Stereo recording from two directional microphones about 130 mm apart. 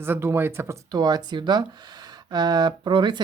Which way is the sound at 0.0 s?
20° right (ahead or behind).